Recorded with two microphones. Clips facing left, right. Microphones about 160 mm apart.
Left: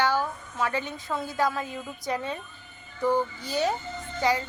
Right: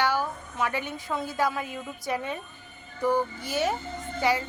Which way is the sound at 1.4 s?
15° right (ahead or behind).